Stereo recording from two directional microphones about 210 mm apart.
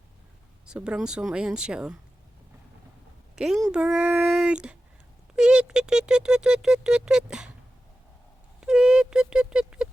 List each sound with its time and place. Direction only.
0.6 s speech: 5° right (ahead or behind)
3.3 s a woman's voice: centre (ahead or behind)
8.6 s a sound: 5° right (ahead or behind)